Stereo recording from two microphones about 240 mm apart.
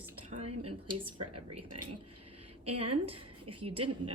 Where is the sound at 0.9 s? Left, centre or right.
Right.